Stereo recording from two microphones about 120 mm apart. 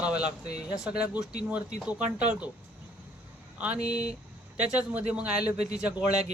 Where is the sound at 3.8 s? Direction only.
65° right (ahead or behind).